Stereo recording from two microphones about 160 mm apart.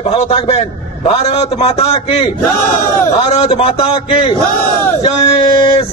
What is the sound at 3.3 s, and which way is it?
A man's voice, 40° left (ahead or behind).